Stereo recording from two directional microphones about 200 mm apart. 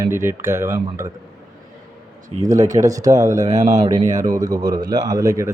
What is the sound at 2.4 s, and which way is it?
Speech, 15° right (ahead or behind).